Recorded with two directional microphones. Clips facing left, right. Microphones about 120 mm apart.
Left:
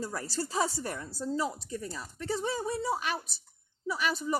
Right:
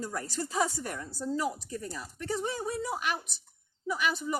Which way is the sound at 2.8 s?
30° left (ahead or behind).